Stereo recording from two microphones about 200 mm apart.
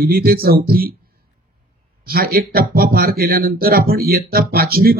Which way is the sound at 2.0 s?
50° right (ahead or behind).